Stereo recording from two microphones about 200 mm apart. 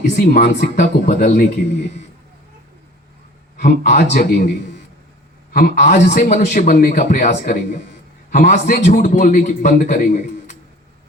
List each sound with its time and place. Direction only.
0.2 s a man's voice: 45° left (ahead or behind)
3.6 s a man's voice: 50° left (ahead or behind)
5.5 s a man's voice: 45° left (ahead or behind)